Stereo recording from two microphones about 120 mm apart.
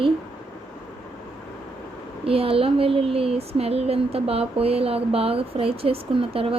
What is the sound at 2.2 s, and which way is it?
Speech, 50° right (ahead or behind).